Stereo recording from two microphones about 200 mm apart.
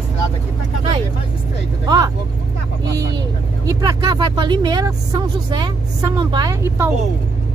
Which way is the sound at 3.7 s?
20° right (ahead or behind).